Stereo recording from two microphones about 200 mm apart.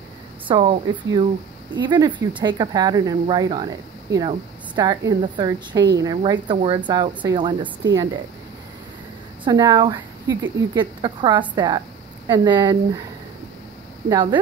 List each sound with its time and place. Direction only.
0.5 s speech: 25° right (ahead or behind)
9.4 s speech: 20° right (ahead or behind)
14.0 s speech: 20° right (ahead or behind)